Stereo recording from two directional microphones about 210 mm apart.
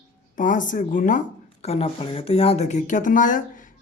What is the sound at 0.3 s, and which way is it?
A man's voice, 40° left (ahead or behind).